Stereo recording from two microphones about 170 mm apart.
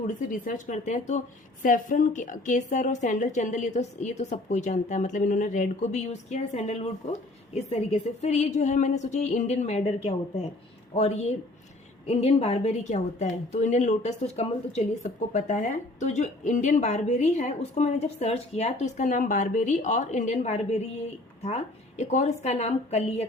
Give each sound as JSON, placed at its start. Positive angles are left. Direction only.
{"t": 0.1, "sound": "a woman's voice", "side_deg": 50}